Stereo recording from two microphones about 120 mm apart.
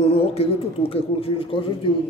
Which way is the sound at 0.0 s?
55° left (ahead or behind).